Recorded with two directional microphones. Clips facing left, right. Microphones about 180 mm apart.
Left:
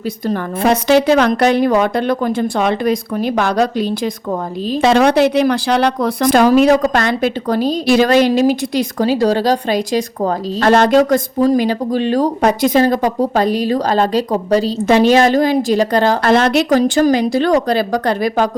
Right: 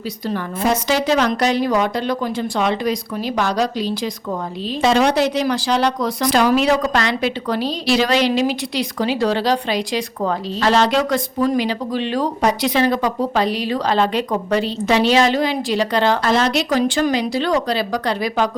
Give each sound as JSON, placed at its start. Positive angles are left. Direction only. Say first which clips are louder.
{"t": 0.6, "sound": "a woman's voice", "louder": "left 7 dB", "side_deg": 60}
{"t": 4.8, "sound": "speech", "louder": "left 4 dB", "side_deg": 60}
{"t": 14.8, "sound": "speech", "louder": "left 5 dB", "side_deg": 50}
{"t": 16.2, "sound": "speech", "louder": "left 5 dB", "side_deg": 60}